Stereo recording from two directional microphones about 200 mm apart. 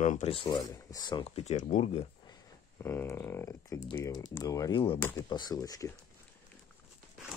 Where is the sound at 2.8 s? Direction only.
10° left (ahead or behind).